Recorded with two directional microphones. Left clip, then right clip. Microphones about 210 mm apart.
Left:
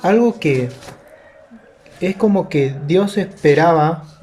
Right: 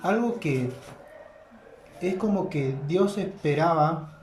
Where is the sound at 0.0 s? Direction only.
40° left (ahead or behind).